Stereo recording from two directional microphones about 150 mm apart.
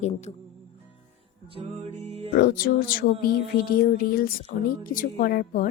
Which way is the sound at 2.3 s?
85° left.